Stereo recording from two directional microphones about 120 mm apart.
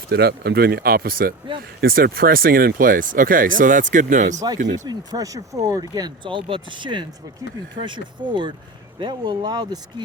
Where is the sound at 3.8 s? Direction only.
90° right.